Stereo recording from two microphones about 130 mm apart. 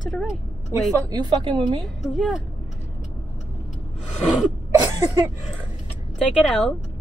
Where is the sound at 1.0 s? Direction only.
35° right (ahead or behind).